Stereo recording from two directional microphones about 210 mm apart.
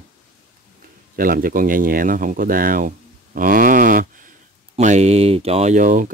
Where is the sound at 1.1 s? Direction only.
45° right (ahead or behind).